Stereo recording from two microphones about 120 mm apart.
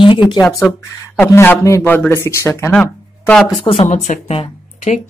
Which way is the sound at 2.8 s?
10° left (ahead or behind).